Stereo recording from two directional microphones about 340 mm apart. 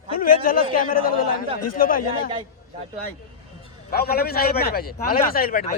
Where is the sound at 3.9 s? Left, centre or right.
Left.